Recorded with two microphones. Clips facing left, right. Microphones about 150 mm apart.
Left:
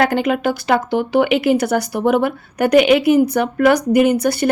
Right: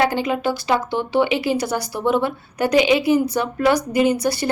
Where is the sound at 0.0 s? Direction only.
60° left (ahead or behind).